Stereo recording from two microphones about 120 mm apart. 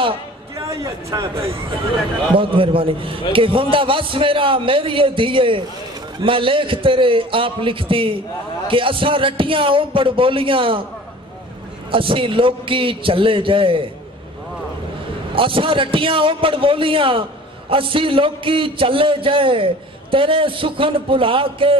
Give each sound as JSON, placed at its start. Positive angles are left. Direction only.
{"t": 0.6, "sound": "a man's voice", "side_deg": -25}
{"t": 2.3, "sound": "a man's voice", "side_deg": -45}
{"t": 11.9, "sound": "a man's voice", "side_deg": -45}
{"t": 15.3, "sound": "a man's voice", "side_deg": -45}